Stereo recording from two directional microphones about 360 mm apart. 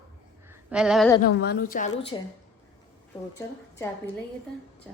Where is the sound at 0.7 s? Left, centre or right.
Centre.